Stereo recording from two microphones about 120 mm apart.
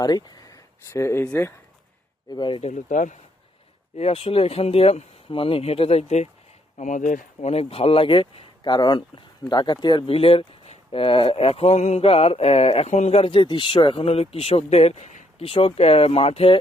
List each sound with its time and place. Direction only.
0.0 s speech: 35° left (ahead or behind); by 1.5 s 20° left (ahead or behind)
2.3 s speech: 40° left (ahead or behind)
2.6 s speech: 75° left (ahead or behind)
3.9 s speech: 55° left (ahead or behind)
6.7 s speech: 90° left; by 9.7 s 40° left (ahead or behind)
10.1 s speech: 55° left (ahead or behind); by 15.4 s 75° left (ahead or behind)
15.4 s speech: 50° left (ahead or behind)